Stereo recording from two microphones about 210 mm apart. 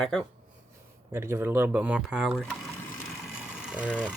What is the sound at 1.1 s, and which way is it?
Speech, 10° right (ahead or behind).